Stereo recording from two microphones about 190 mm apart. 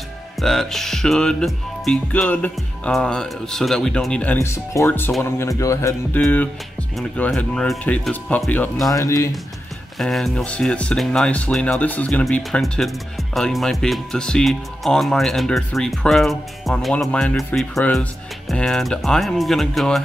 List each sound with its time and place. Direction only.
0.4 s speech: centre (ahead or behind)
8.9 s speech: 15° left (ahead or behind)
9.9 s speech: centre (ahead or behind)